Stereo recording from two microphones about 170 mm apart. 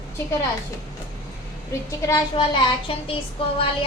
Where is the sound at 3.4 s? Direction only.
30° left (ahead or behind).